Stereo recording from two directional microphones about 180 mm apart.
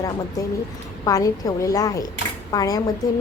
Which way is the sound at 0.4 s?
20° left (ahead or behind).